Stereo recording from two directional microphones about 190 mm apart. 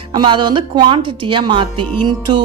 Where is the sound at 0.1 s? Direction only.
25° right (ahead or behind).